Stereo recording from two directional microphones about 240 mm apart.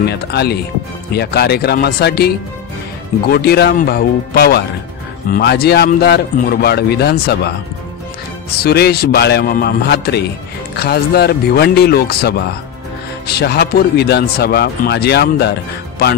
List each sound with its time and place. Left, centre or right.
0.1 s a man's voice: left
8.5 s a man's voice: left